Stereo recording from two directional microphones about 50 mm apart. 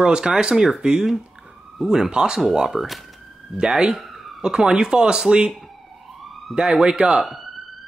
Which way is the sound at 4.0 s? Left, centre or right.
Centre.